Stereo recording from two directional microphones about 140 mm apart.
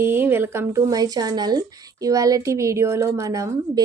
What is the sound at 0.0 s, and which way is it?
Speech, 15° right (ahead or behind).